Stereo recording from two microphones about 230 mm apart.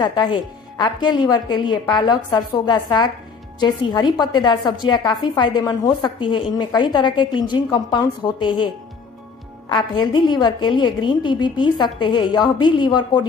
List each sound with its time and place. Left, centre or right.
0.0 s a woman's voice: centre
10.1 s a woman's voice: centre